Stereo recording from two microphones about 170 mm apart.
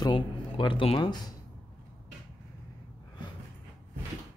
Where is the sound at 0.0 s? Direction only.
30° left (ahead or behind).